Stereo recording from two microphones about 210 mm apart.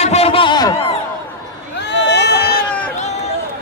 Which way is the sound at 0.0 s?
30° left (ahead or behind).